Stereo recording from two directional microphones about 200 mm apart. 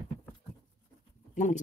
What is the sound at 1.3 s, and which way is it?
Speech, 40° left (ahead or behind).